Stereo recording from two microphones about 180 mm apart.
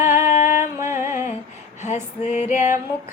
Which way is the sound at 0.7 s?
15° right (ahead or behind).